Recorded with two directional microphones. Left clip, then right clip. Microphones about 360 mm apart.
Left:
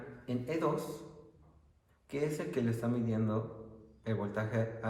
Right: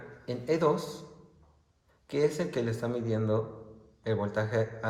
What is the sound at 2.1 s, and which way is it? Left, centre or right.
A man's voice, right.